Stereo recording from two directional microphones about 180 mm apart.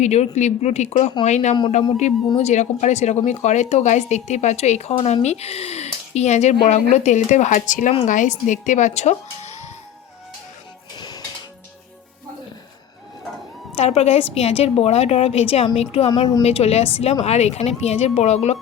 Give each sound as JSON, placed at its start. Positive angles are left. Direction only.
{"t": 0.0, "sound": "speech", "side_deg": 40}
{"t": 10.9, "sound": "music", "side_deg": 25}
{"t": 13.7, "sound": "speech", "side_deg": 35}